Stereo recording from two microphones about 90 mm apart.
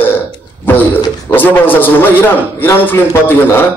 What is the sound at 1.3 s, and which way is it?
A man's voice, 20° left (ahead or behind).